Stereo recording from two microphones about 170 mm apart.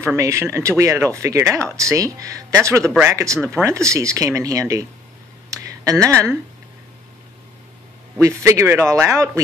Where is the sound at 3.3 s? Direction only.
5° left (ahead or behind).